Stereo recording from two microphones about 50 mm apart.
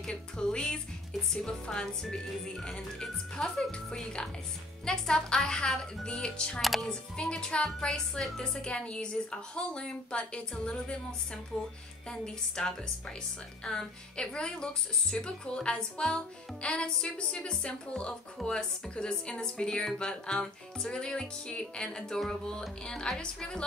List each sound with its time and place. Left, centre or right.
0.1 s speech: centre